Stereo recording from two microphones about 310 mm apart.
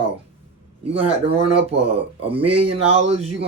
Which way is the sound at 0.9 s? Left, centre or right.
Centre.